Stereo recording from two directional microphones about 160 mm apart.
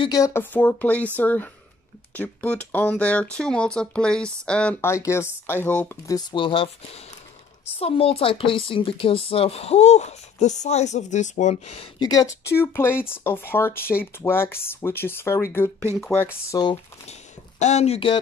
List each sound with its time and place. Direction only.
0.0 s speech: 20° left (ahead or behind); by 4.9 s 5° left (ahead or behind)
4.9 s speech: 15° left (ahead or behind)
6.1 s speech: 30° left (ahead or behind)
12.0 s speech: 25° left (ahead or behind)
17.1 s speech: 45° left (ahead or behind)